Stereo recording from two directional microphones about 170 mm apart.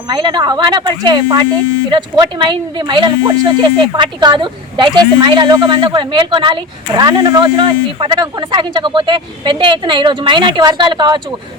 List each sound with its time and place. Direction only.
0.1 s speech: 25° right (ahead or behind)